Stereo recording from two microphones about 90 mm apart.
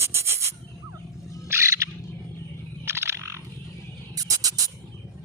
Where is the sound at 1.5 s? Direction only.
35° right (ahead or behind).